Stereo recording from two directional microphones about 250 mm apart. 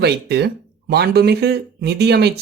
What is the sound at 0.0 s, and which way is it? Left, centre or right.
Speech, right.